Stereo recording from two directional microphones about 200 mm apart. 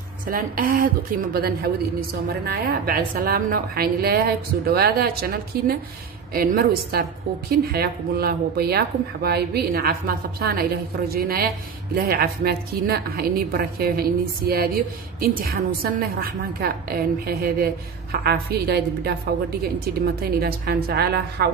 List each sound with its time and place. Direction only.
0.3 s a woman's voice: 45° right (ahead or behind)